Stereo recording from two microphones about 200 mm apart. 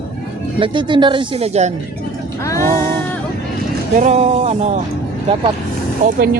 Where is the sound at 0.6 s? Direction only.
25° right (ahead or behind).